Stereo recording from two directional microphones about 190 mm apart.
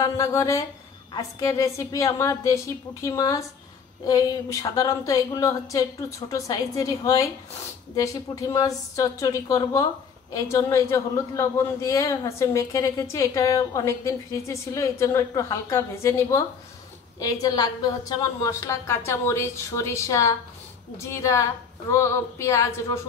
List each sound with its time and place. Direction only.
0.0 s a man's voice: 15° left (ahead or behind)